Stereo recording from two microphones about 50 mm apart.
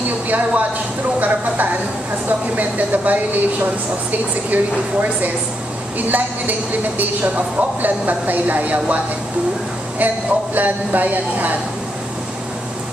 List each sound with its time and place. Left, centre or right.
0.3 s a woman's voice: right
5.9 s a woman's voice: right